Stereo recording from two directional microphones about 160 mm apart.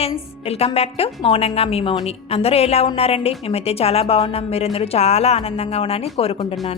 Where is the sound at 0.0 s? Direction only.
40° left (ahead or behind).